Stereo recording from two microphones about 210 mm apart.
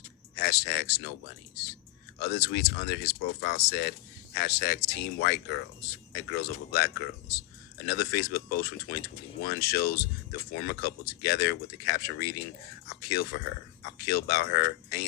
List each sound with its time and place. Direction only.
0.3 s speech: 50° left (ahead or behind)
2.1 s speech: 50° left (ahead or behind)
6.7 s speech: 50° left (ahead or behind)